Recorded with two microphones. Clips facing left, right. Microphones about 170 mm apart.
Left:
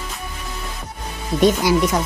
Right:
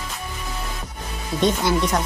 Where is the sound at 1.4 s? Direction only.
10° left (ahead or behind).